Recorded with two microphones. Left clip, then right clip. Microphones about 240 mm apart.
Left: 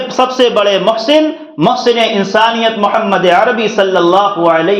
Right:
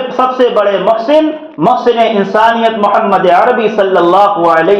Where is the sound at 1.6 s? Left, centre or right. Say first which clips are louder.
Right 1 dB; left.